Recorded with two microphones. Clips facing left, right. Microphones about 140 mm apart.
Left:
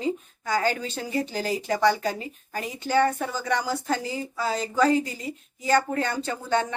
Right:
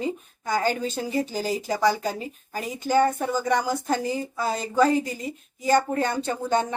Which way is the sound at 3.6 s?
20° right (ahead or behind).